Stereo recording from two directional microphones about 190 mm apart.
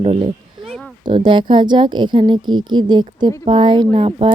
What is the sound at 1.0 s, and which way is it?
Speech, 25° right (ahead or behind).